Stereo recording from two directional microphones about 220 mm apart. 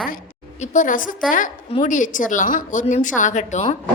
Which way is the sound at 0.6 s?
35° left (ahead or behind).